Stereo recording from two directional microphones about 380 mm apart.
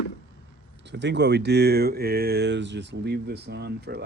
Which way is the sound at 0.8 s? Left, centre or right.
Right.